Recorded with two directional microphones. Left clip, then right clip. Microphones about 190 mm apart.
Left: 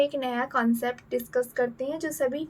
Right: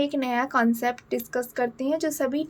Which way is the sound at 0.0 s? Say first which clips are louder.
Right 1 dB; 45° right (ahead or behind).